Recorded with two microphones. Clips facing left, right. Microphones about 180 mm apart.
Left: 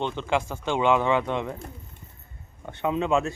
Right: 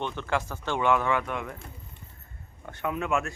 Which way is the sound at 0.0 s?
20° left (ahead or behind).